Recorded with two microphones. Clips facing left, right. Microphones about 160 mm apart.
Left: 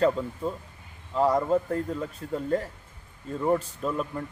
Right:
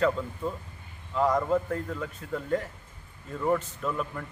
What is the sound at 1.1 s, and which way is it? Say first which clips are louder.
Speech: left 2 dB; 35° left (ahead or behind).